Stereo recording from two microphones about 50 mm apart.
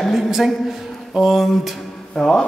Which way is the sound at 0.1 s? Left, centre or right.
Centre.